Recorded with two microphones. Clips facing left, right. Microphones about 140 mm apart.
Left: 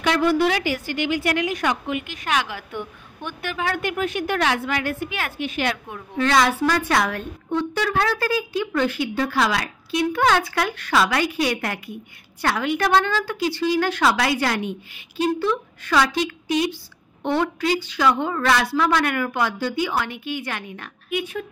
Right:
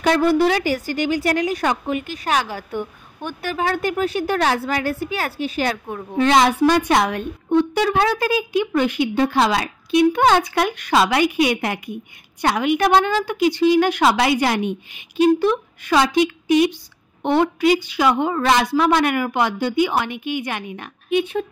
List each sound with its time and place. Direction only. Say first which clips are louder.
0.0 s a woman's voice: right 3 dB; 40° right (ahead or behind)
6.1 s speech: right 4 dB; 20° right (ahead or behind)